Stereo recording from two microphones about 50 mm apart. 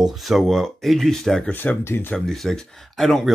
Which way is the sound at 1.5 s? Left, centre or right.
Left.